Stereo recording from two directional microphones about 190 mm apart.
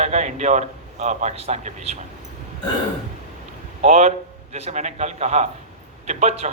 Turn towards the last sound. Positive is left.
turn(degrees=-35)  # may be behind; listen again after turning